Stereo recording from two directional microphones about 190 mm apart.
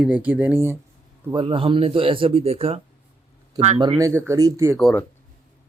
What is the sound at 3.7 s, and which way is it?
Speech, 20° right (ahead or behind).